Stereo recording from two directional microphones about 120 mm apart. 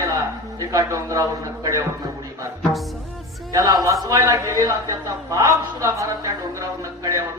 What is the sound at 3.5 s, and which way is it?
A man's voice, 30° right (ahead or behind).